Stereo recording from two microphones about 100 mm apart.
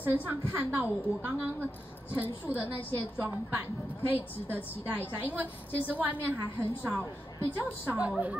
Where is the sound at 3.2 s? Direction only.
15° right (ahead or behind).